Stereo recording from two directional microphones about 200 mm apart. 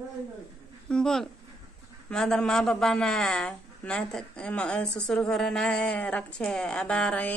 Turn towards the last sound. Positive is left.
turn(degrees=5)  # may be behind; listen again after turning